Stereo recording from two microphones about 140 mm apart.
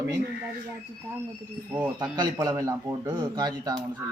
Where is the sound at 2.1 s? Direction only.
30° right (ahead or behind).